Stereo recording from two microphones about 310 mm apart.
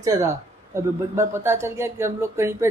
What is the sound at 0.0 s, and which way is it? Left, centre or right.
Speech, centre.